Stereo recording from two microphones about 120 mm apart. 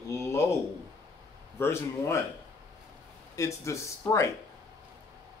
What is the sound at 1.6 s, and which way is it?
Speech, 20° left (ahead or behind).